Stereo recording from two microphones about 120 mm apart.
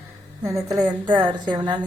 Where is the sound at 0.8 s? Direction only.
35° right (ahead or behind).